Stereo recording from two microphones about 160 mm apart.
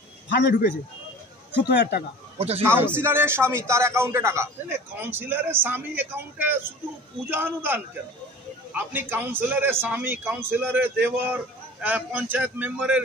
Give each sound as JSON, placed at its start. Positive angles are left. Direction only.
{"t": 0.3, "sound": "a man's voice", "side_deg": 90}
{"t": 1.8, "sound": "a man's voice", "side_deg": 80}
{"t": 2.3, "sound": "a man's voice", "side_deg": -40}
{"t": 2.6, "sound": "a man's voice", "side_deg": -15}